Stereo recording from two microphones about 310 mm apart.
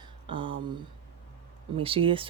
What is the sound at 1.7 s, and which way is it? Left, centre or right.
Speech, centre.